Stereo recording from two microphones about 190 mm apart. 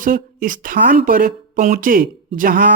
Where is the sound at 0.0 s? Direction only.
45° right (ahead or behind).